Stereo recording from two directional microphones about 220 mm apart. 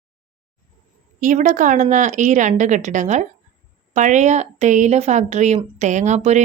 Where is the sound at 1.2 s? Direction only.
35° right (ahead or behind).